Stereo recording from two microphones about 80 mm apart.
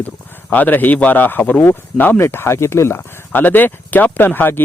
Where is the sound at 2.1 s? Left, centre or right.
Left.